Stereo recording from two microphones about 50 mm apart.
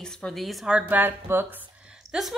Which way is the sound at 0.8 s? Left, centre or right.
Right.